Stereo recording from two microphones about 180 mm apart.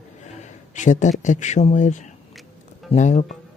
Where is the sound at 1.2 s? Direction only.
40° left (ahead or behind).